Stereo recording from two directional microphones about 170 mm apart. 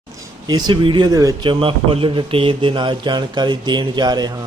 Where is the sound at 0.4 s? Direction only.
25° right (ahead or behind).